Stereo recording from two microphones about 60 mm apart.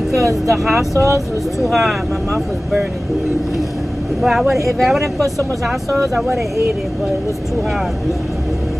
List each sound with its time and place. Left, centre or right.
0.1 s speech: right
1.6 s speech: centre
4.2 s speech: centre